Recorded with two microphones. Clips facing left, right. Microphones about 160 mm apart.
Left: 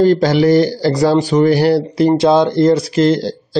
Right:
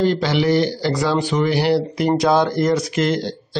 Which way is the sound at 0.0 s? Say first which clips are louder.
Left 7 dB; 40° left (ahead or behind).